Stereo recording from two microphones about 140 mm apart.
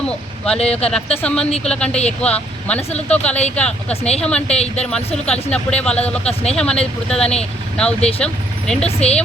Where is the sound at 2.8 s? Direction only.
50° left (ahead or behind).